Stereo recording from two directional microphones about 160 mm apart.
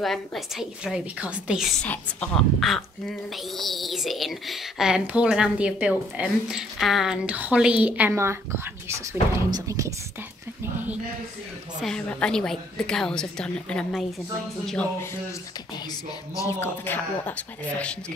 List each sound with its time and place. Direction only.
0.0 s speech: centre (ahead or behind)
1.8 s speech: 5° left (ahead or behind); by 8.4 s 15° right (ahead or behind)
9.5 s speech: 20° right (ahead or behind)
11.8 s speech: 5° left (ahead or behind)
16.3 s speech: 15° left (ahead or behind)